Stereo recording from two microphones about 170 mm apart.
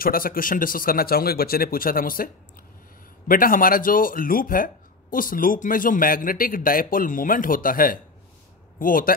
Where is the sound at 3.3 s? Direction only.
55° left (ahead or behind).